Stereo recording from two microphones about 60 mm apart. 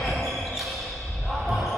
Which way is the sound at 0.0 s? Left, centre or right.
Centre.